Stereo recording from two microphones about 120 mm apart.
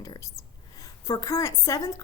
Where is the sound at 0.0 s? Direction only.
30° left (ahead or behind).